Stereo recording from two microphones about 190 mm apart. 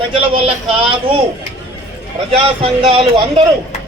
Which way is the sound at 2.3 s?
30° right (ahead or behind).